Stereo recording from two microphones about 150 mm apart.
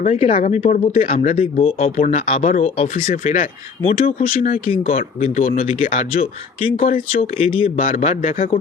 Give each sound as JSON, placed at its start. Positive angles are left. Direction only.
{"t": 0.0, "sound": "speech", "side_deg": 50}
{"t": 2.9, "sound": "speech", "side_deg": 55}
{"t": 4.0, "sound": "speech", "side_deg": 60}
{"t": 4.6, "sound": "speech", "side_deg": 40}
{"t": 4.9, "sound": "speech", "side_deg": 60}
{"t": 7.9, "sound": "speech", "side_deg": 60}